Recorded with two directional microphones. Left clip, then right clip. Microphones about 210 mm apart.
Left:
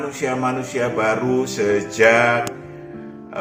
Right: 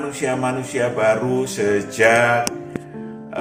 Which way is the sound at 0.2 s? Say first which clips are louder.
Even; centre (ahead or behind).